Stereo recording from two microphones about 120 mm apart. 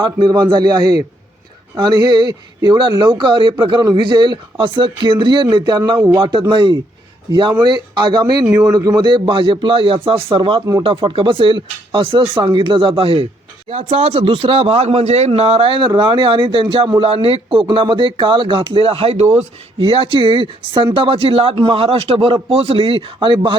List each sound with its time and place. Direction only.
0.0 s a man's voice: 40° right (ahead or behind)
13.7 s speech: 60° right (ahead or behind)
15.3 s speech: 55° right (ahead or behind)
19.8 s speech: 50° right (ahead or behind)